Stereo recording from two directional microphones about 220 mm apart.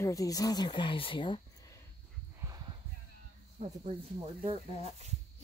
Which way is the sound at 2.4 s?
20° right (ahead or behind).